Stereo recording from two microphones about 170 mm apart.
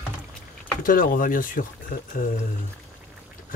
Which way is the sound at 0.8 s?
55° left (ahead or behind).